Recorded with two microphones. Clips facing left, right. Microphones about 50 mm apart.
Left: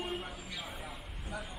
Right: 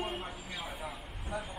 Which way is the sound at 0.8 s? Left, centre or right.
Right.